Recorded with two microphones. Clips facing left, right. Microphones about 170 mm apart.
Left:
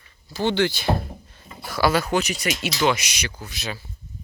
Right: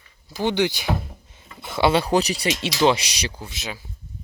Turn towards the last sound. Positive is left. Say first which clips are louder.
# left 1 dB
turn(degrees=-20)  # may be behind; listen again after turning